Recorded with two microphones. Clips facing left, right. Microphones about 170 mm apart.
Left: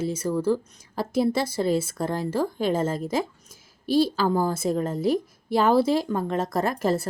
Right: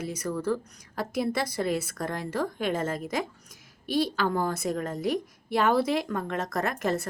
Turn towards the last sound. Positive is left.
turn(degrees=30)  # may be behind; listen again after turning